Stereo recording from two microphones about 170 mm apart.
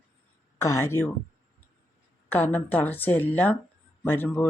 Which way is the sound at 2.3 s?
10° left (ahead or behind).